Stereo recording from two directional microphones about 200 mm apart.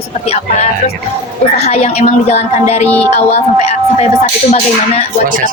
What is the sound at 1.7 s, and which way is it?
A woman's voice, 30° left (ahead or behind).